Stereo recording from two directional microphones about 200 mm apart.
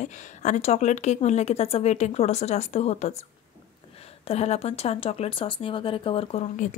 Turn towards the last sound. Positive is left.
turn(degrees=35)  # may be behind; listen again after turning